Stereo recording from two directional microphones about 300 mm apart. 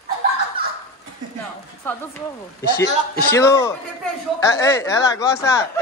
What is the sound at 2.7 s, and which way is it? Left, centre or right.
Speech, left.